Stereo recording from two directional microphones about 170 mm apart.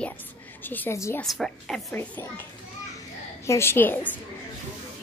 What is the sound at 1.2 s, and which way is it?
Speech, centre (ahead or behind).